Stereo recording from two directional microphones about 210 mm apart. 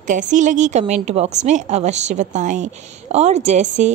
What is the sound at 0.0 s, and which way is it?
A woman's voice, 35° right (ahead or behind).